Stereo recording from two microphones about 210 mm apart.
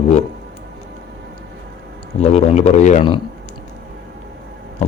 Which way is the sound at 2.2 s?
30° left (ahead or behind).